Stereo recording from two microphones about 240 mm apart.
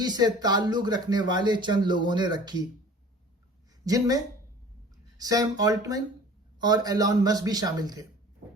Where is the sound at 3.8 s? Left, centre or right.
Centre.